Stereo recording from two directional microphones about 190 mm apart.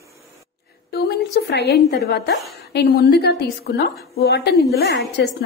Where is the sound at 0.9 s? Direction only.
55° left (ahead or behind).